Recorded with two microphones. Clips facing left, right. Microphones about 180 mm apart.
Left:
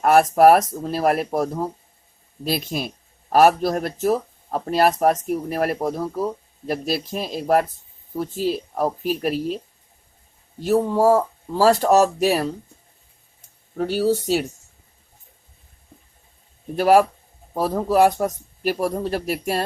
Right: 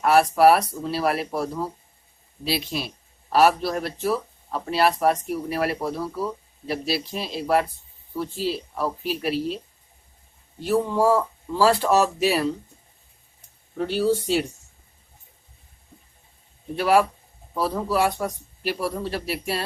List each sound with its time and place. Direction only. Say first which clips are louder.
0.0 s speech: left 3 dB; 45° left (ahead or behind)
10.6 s speech: left 3 dB; 45° left (ahead or behind)
13.7 s speech: left 2 dB; 40° left (ahead or behind)
16.7 s speech: left 4 dB; 45° left (ahead or behind)